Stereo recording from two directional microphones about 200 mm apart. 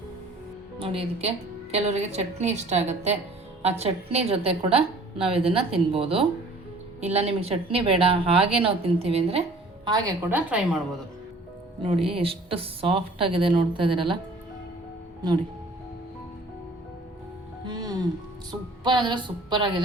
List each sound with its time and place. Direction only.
0.8 s a woman's voice: 30° right (ahead or behind)
9.8 s a woman's voice: 15° right (ahead or behind)
11.8 s a woman's voice: 30° right (ahead or behind)
17.7 s music: 20° right (ahead or behind)
18.8 s a woman's voice: 20° right (ahead or behind)